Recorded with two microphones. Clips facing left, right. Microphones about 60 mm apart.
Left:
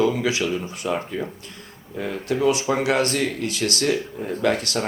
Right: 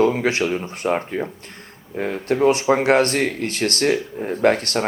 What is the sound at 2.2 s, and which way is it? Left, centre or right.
Speech, right.